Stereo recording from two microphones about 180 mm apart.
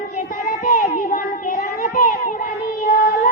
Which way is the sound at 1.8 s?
50° left (ahead or behind).